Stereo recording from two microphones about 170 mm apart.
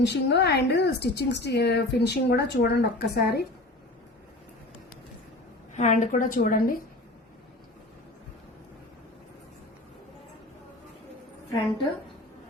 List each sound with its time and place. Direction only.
0.0 s a woman's voice: 75° left (ahead or behind)
5.7 s a woman's voice: 45° left (ahead or behind)